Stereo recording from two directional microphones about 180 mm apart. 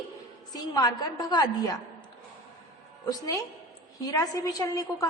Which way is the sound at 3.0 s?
20° left (ahead or behind).